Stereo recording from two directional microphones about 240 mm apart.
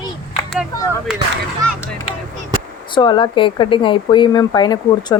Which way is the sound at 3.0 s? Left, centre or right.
Centre.